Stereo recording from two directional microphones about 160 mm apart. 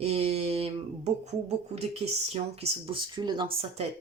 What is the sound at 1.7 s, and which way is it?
Speech, 40° right (ahead or behind).